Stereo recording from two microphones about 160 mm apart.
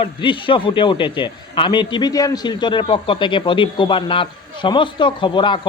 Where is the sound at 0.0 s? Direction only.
30° left (ahead or behind).